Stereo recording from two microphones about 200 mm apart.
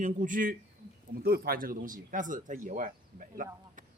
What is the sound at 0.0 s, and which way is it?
Speech, 40° right (ahead or behind).